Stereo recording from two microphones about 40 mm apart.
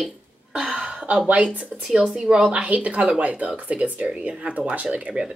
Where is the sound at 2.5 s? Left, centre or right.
Right.